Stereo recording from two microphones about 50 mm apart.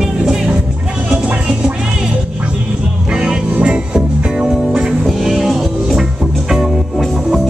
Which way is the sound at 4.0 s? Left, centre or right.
Centre.